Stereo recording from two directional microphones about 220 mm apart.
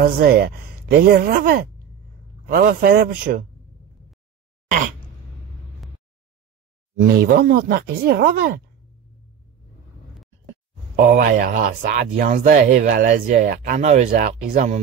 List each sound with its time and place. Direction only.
0.0 s speech: 45° right (ahead or behind)
7.1 s speech: 45° right (ahead or behind)
11.0 s speech: 40° right (ahead or behind)